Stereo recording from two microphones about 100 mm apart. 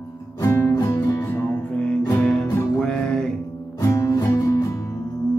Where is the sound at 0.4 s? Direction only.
25° left (ahead or behind).